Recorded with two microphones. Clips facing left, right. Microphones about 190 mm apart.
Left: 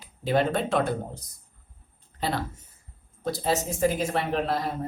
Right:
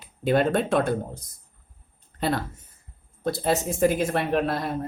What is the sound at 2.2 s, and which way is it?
A woman's voice, 50° right (ahead or behind).